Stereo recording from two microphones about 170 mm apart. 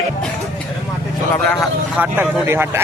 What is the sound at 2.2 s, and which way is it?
Speech, 15° right (ahead or behind).